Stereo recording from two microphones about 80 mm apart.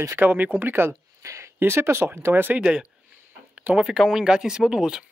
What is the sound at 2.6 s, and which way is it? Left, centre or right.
Speech, centre.